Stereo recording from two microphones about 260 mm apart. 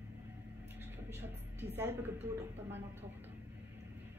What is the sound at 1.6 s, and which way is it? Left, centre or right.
Speech, centre.